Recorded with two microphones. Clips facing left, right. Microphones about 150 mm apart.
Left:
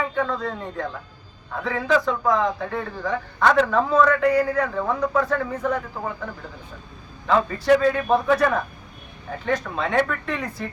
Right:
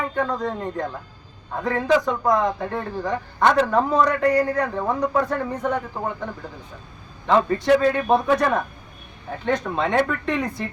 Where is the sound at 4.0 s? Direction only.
35° right (ahead or behind).